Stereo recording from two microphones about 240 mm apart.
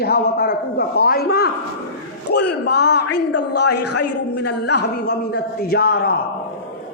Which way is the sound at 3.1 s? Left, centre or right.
Left.